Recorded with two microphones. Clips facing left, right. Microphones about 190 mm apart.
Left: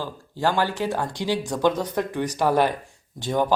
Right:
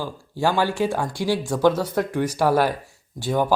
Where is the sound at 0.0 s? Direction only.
10° right (ahead or behind).